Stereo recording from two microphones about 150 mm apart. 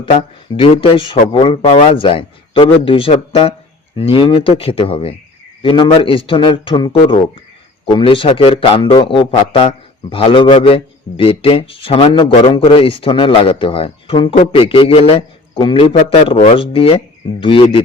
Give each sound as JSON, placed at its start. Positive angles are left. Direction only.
{"t": 0.5, "sound": "a man's voice", "side_deg": 35}